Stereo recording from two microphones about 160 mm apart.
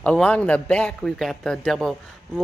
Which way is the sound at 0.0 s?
5° left (ahead or behind).